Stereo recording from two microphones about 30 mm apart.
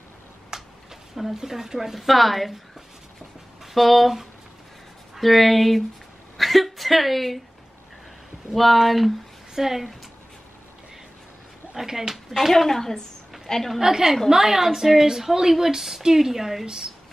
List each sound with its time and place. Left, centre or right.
0.5 s a sound: centre
1.1 s speech: centre
2.0 s speech: centre
3.6 s speech: centre
5.1 s speech: centre
6.3 s a sound: centre
8.5 s speech: centre
11.7 s speech: centre
12.5 s a woman's voice: centre
13.7 s speech: centre
16.6 s speech: right